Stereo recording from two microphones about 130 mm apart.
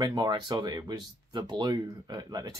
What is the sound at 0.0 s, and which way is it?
Speech, 30° right (ahead or behind).